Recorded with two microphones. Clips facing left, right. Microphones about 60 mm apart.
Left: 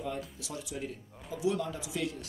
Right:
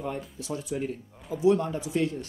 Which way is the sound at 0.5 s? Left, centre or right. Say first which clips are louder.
Right 10 dB; right.